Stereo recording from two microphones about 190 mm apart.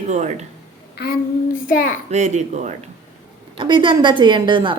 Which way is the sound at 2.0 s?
35° right (ahead or behind).